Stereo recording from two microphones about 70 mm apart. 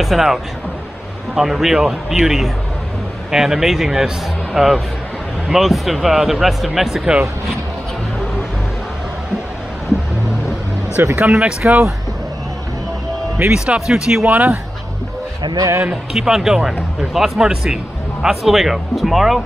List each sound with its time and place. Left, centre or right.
0.0 s speech: centre
11.1 s speech: centre
13.5 s speech: centre
14.2 s speech: right
15.4 s a man's voice: right
16.1 s speech: centre